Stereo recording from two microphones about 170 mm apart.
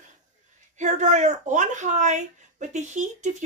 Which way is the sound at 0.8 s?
45° right (ahead or behind).